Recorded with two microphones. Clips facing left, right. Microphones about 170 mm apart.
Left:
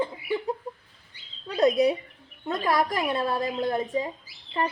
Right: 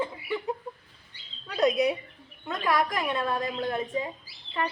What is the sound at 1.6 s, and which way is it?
A woman's voice, 30° left (ahead or behind).